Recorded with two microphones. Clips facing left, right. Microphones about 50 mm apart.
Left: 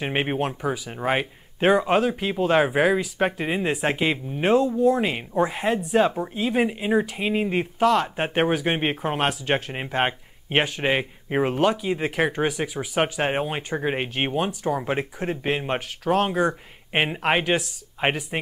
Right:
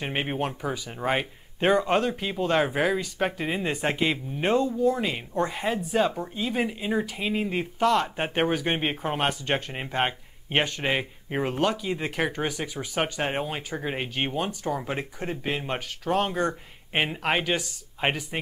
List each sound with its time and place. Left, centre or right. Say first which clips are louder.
0.0 s speech: left 4 dB; centre